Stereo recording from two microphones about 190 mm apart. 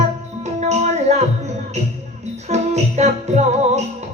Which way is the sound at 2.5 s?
35° right (ahead or behind).